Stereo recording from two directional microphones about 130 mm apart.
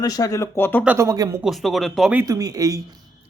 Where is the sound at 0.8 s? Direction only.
20° right (ahead or behind).